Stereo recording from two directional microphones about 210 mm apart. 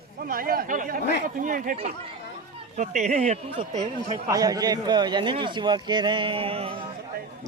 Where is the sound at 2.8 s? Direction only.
35° right (ahead or behind).